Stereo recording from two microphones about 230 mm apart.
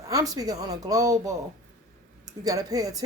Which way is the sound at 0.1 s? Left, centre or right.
Centre.